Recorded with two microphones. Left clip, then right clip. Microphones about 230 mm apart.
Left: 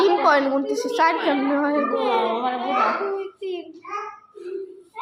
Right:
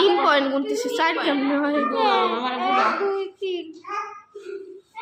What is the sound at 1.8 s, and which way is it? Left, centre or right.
Speech, right.